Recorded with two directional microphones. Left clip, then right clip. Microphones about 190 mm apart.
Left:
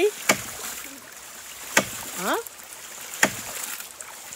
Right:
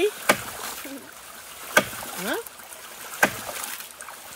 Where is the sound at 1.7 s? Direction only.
5° left (ahead or behind).